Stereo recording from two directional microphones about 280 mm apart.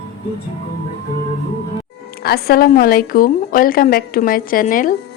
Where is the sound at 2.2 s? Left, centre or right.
Left.